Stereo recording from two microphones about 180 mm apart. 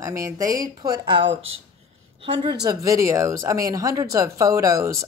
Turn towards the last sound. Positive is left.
turn(degrees=-20)  # may be behind; listen again after turning